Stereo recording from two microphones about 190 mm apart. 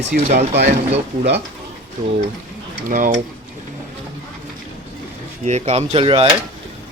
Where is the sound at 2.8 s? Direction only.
45° right (ahead or behind).